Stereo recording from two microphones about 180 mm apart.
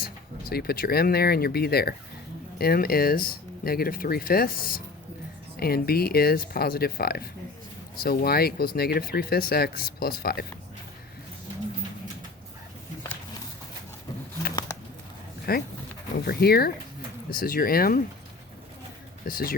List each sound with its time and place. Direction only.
0.0 s speech: 55° left (ahead or behind)
15.5 s speech: 55° left (ahead or behind)
19.2 s speech: 55° left (ahead or behind)